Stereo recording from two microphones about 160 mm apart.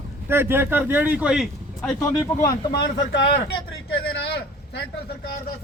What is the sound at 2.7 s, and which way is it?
Speech, 90° left.